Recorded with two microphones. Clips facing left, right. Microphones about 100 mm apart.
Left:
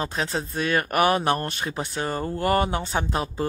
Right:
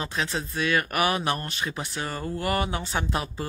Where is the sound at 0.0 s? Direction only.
45° left (ahead or behind).